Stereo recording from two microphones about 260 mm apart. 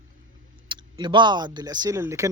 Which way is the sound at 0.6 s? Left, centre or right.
Centre.